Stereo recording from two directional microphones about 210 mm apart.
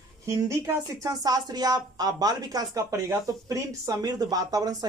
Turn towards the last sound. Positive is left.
turn(degrees=-20)  # may be behind; listen again after turning